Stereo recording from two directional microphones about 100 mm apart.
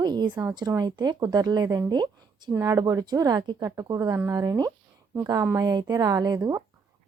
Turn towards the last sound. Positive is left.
turn(degrees=-35)  # may be behind; listen again after turning